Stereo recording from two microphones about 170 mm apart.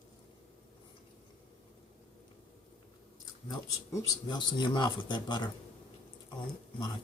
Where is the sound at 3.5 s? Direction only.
20° left (ahead or behind).